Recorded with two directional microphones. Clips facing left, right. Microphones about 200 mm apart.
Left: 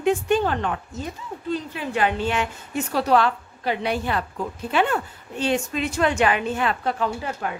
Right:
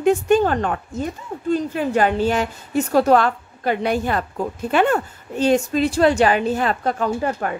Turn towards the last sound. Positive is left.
turn(degrees=-50)  # may be behind; listen again after turning